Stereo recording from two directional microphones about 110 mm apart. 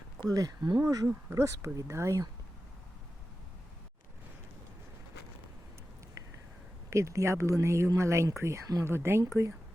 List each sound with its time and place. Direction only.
0.2 s speech: 35° right (ahead or behind)
6.9 s speech: 25° right (ahead or behind)